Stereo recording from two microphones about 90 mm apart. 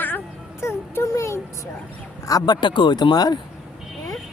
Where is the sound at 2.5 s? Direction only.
60° left (ahead or behind).